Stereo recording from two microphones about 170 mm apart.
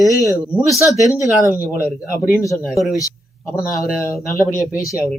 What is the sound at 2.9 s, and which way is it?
Speech, 20° left (ahead or behind).